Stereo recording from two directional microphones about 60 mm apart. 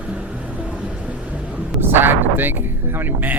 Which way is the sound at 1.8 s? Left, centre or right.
Right.